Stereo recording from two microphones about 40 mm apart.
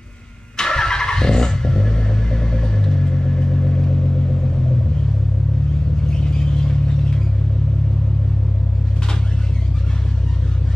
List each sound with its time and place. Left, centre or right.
0.6 s vehicle: centre
6.0 s vehicle: left